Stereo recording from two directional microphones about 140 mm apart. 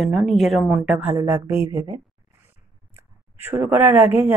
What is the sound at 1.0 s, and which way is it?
Speech, 15° right (ahead or behind).